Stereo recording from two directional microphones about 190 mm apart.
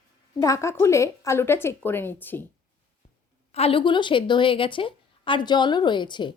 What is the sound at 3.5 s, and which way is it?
Speech, 30° left (ahead or behind).